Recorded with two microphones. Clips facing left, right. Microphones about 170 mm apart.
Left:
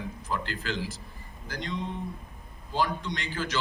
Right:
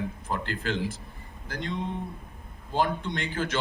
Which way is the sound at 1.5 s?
55° right (ahead or behind).